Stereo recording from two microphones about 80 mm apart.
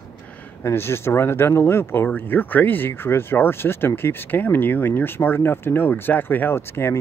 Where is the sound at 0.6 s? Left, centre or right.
Left.